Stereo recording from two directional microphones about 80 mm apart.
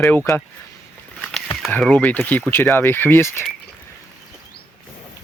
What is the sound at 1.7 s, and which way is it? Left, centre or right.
Speech, centre.